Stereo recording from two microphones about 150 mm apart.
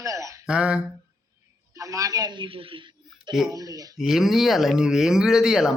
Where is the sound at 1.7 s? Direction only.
25° right (ahead or behind).